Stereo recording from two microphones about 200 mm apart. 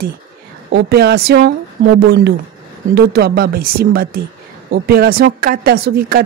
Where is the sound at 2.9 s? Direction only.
55° right (ahead or behind).